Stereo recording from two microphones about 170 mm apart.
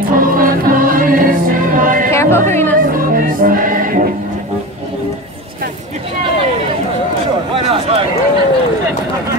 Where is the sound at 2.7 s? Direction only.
55° right (ahead or behind).